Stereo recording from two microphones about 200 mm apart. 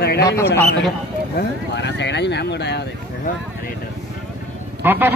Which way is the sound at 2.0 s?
60° left (ahead or behind).